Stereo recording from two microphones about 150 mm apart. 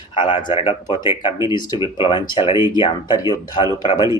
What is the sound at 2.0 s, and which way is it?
Speech, 35° left (ahead or behind).